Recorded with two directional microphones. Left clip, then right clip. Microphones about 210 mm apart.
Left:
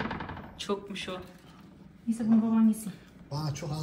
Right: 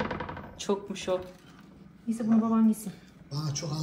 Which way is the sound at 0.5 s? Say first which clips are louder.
Right 2 dB; 25° right (ahead or behind).